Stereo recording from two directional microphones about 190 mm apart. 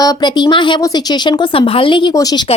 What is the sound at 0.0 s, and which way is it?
Speech, 25° left (ahead or behind).